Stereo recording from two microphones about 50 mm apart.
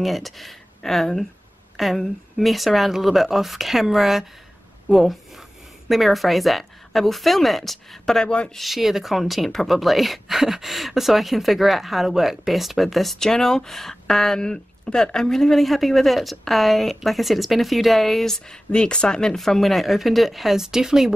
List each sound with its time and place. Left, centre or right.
0.0 s speech: centre
8.5 s speech: centre
18.7 s speech: centre
19.3 s speech: centre